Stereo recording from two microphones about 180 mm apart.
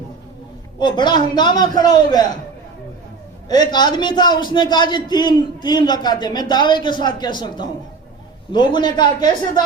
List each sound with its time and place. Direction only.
0.8 s a man's voice: 25° left (ahead or behind)
3.5 s a man's voice: 25° left (ahead or behind)